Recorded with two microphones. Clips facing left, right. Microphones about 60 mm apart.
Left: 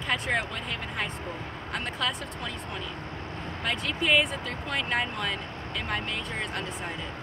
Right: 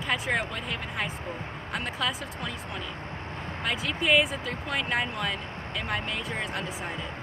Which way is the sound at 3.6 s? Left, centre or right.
Centre.